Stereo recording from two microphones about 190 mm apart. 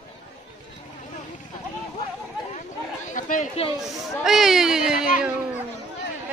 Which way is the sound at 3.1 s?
45° left (ahead or behind).